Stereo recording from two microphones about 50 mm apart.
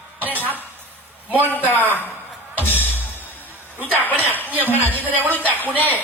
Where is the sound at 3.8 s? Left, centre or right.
Left.